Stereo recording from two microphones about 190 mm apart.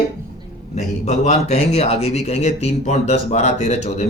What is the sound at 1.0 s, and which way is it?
Speech, 35° left (ahead or behind).